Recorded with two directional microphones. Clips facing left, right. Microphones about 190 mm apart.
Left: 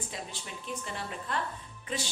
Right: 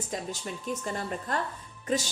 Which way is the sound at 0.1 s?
45° right (ahead or behind).